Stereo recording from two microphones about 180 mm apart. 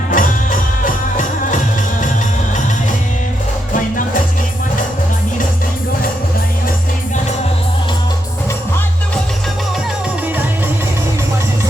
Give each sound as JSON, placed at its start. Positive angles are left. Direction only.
{"t": 0.1, "sound": "music", "side_deg": 50}
{"t": 3.7, "sound": "music", "side_deg": 45}